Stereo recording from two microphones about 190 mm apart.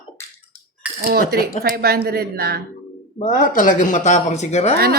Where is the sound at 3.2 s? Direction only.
45° left (ahead or behind).